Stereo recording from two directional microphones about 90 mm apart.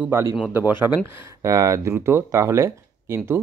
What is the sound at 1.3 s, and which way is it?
Speech, 40° right (ahead or behind).